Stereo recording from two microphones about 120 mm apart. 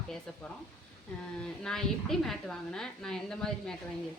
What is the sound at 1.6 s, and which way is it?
A woman's voice, 5° left (ahead or behind).